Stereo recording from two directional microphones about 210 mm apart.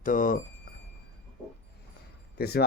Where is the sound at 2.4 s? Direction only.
50° left (ahead or behind).